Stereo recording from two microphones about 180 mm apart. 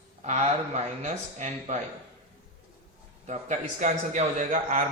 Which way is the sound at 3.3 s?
40° right (ahead or behind).